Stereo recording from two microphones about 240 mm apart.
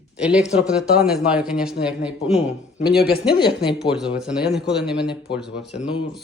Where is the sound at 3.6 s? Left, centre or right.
Centre.